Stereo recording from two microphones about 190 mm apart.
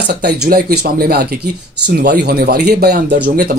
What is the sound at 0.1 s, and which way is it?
Speech, 60° right (ahead or behind).